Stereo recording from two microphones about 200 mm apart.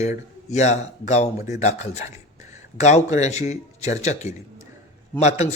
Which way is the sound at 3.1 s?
35° left (ahead or behind).